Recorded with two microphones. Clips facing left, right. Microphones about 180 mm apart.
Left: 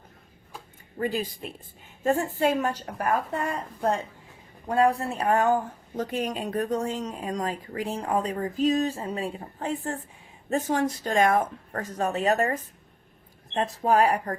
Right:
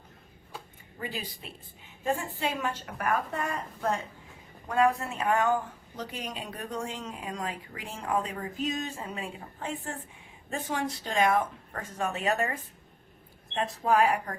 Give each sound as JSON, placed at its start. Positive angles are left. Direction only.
{"t": 0.9, "sound": "speech", "side_deg": 45}